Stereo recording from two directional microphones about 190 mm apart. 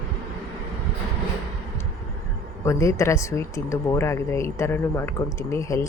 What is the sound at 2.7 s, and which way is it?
Speech, 15° left (ahead or behind).